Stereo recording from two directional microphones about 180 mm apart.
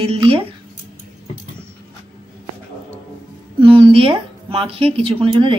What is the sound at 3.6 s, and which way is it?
Speech, 30° right (ahead or behind).